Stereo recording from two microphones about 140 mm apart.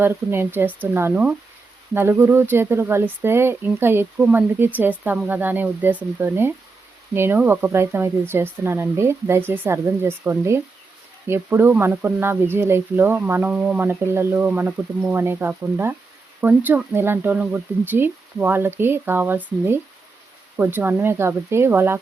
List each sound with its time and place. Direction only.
0.0 s speech: 15° right (ahead or behind)